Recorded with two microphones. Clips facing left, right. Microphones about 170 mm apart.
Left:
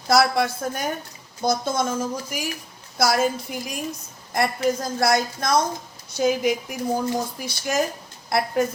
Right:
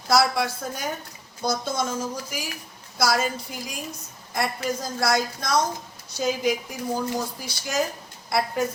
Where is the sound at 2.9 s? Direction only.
55° left (ahead or behind).